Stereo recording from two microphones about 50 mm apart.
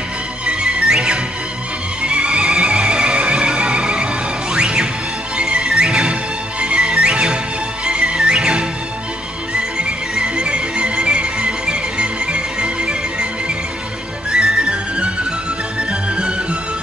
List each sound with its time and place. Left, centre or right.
0.5 s music: right
14.3 s music: right